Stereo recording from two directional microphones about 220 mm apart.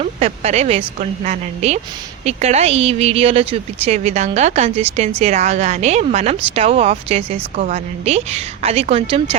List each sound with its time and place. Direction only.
0.0 s a woman's voice: 30° right (ahead or behind)